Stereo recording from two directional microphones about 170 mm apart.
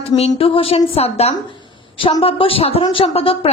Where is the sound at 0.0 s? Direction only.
35° left (ahead or behind).